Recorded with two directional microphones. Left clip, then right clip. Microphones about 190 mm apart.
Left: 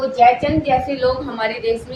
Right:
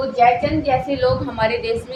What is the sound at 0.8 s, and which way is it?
Speech, 20° right (ahead or behind).